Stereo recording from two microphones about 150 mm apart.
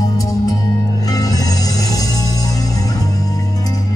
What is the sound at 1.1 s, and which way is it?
Music, 25° left (ahead or behind).